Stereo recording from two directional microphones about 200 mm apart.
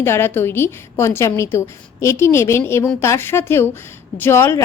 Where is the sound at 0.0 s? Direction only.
10° left (ahead or behind).